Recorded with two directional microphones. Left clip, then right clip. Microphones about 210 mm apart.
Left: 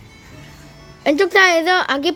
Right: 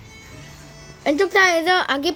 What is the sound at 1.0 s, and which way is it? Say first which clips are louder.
Speech: left 3 dB; 10° left (ahead or behind).